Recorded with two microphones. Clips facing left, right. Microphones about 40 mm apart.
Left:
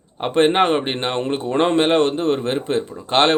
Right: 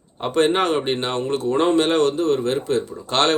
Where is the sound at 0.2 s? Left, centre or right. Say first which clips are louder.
Left 3 dB; left.